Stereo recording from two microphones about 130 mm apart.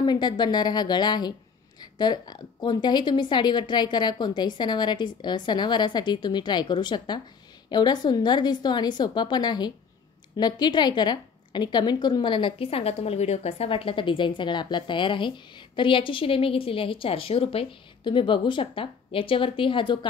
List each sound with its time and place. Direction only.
0.0 s a woman's voice: 35° left (ahead or behind)